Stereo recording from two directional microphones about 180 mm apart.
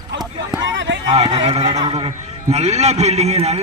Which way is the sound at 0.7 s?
90° right.